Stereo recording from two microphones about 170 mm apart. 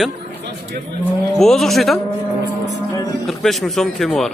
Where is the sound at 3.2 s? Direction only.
Centre (ahead or behind).